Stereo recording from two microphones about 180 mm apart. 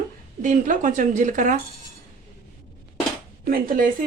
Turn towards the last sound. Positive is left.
turn(degrees=-50)  # may be behind; listen again after turning